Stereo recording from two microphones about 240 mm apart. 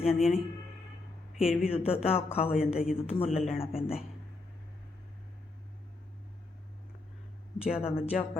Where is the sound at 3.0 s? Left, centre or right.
Left.